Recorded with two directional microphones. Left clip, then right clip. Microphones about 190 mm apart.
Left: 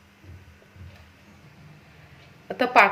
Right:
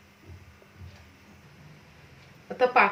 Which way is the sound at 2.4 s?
55° left (ahead or behind).